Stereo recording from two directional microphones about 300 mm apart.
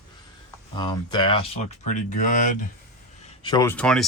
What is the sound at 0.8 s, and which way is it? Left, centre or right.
Speech, centre.